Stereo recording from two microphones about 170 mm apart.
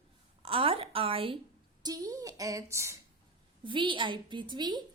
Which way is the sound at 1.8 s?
20° right (ahead or behind).